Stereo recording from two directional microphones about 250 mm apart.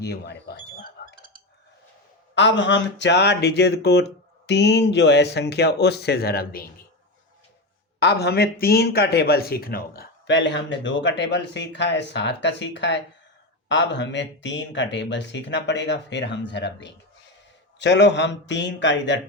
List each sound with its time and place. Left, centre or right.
0.0 s squawk: left
2.3 s speech: left
7.9 s speech: left